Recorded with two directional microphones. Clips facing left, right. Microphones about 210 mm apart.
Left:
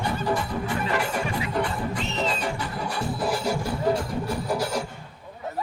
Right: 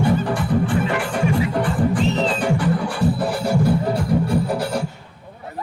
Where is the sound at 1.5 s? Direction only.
50° right (ahead or behind).